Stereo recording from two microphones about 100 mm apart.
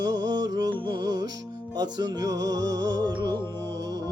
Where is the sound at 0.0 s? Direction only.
45° right (ahead or behind).